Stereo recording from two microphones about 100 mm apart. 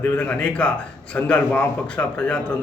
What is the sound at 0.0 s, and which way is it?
A man's voice, 15° left (ahead or behind).